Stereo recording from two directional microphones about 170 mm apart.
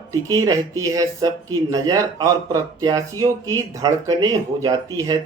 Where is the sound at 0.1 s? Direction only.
20° right (ahead or behind).